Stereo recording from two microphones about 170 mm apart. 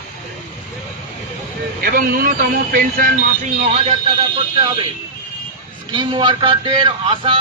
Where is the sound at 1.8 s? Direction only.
60° right (ahead or behind).